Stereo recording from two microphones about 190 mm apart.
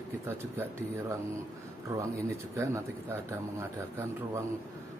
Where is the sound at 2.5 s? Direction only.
15° right (ahead or behind).